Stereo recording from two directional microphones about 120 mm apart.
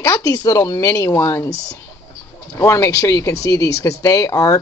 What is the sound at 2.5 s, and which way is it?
A woman's voice, 25° left (ahead or behind).